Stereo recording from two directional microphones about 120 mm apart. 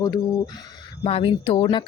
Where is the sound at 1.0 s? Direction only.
50° left (ahead or behind).